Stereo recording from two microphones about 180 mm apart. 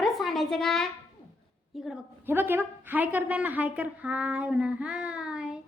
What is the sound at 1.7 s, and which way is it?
A woman's voice, centre (ahead or behind).